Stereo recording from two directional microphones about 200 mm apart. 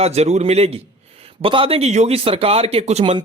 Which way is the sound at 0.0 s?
30° right (ahead or behind).